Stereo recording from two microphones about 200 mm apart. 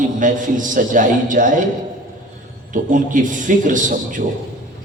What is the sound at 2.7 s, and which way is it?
A man's voice, 40° right (ahead or behind).